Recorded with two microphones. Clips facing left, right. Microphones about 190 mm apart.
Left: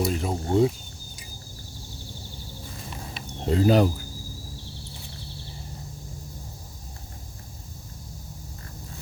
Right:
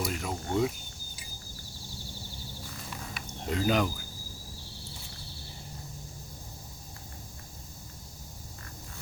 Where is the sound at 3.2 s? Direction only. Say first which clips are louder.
Left 8 dB; 30° left (ahead or behind).